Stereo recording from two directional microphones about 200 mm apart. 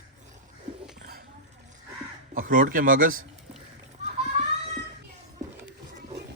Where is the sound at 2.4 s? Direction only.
45° right (ahead or behind).